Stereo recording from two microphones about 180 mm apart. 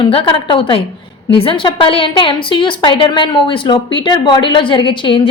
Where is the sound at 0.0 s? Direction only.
30° left (ahead or behind).